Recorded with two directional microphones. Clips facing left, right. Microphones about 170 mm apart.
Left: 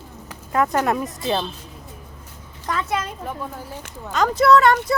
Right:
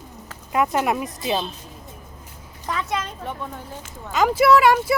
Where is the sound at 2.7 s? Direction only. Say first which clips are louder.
Left 2 dB; centre (ahead or behind).